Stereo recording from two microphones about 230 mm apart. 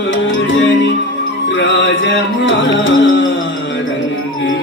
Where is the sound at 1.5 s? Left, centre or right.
Left.